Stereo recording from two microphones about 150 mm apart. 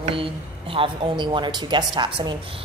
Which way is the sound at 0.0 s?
35° right (ahead or behind).